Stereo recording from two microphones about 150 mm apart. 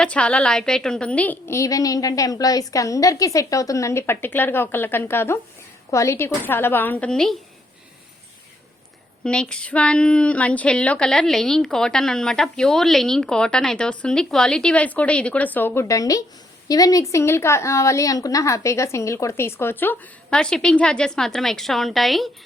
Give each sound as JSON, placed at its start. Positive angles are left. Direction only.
{"t": 0.0, "sound": "a woman's voice", "side_deg": 5}
{"t": 9.2, "sound": "a woman's voice", "side_deg": 5}